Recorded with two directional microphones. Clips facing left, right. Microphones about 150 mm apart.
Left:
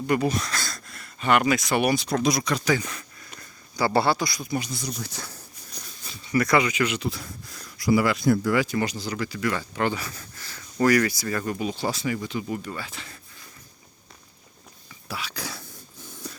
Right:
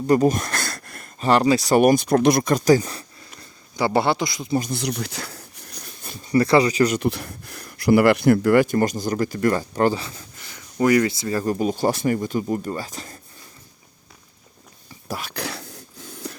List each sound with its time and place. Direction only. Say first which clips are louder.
0.1 s speech: right 7 dB; 45° right (ahead or behind)
1.2 s speech: right 4 dB; 30° right (ahead or behind)
3.8 s a man's voice: right 2 dB; 20° right (ahead or behind)
4.8 s a sound: right 7 dB; 75° right (ahead or behind)
6.3 s speech: right 5 dB; 30° right (ahead or behind)
7.0 s speech: right 7 dB; 65° right (ahead or behind); by 10.0 s 40° right (ahead or behind)
10.0 s speech: right 1 dB; 20° right (ahead or behind); by 13.1 s 40° right (ahead or behind)
15.0 s a sound: right 4 dB; 45° right (ahead or behind)
15.4 s a sound: right 6 dB; 75° right (ahead or behind)